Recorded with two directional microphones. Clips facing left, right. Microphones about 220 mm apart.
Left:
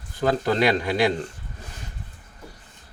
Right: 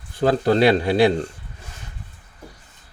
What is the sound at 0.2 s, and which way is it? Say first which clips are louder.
Speech: right 4 dB; 30° right (ahead or behind).